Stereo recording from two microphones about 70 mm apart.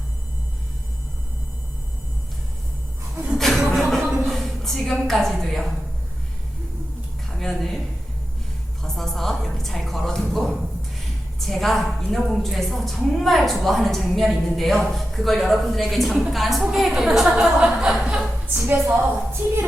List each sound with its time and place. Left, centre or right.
3.3 s music: centre
3.7 s a sound: centre
7.3 s speech: centre
8.8 s a woman's voice: centre
18.5 s a woman's voice: right